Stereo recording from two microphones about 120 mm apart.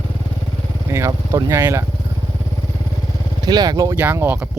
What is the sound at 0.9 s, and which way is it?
Speech, 25° right (ahead or behind).